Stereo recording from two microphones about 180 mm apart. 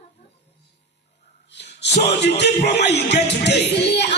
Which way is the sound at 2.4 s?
70° left (ahead or behind).